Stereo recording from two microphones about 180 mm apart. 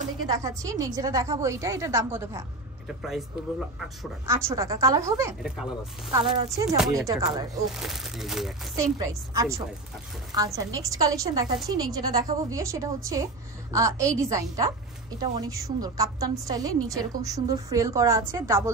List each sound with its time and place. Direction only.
0.3 s a woman's voice: 20° right (ahead or behind)
2.9 s speech: centre (ahead or behind)
4.5 s a woman's voice: 15° right (ahead or behind)
5.4 s speech: 5° right (ahead or behind)
6.1 s a woman's voice: 20° right (ahead or behind)
7.6 s speech: centre (ahead or behind)
8.7 s a woman's voice: 20° right (ahead or behind)